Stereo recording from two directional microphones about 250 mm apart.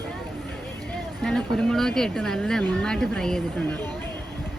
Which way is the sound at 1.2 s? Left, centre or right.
Centre.